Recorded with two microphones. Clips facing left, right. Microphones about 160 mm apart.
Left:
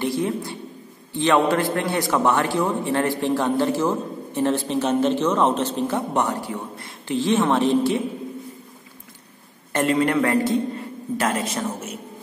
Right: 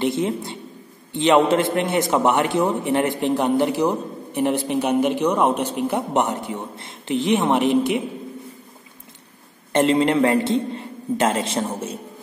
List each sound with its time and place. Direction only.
0.0 s a man's voice: 20° right (ahead or behind)
9.7 s a man's voice: 25° right (ahead or behind)